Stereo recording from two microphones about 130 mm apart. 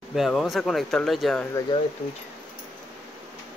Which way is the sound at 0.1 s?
Centre (ahead or behind).